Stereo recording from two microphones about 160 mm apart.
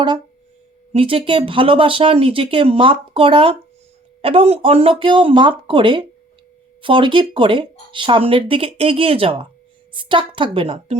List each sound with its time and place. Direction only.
0.9 s speech: 35° right (ahead or behind)